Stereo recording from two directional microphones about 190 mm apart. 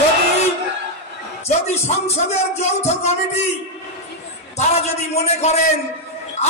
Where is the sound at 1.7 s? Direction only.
35° left (ahead or behind).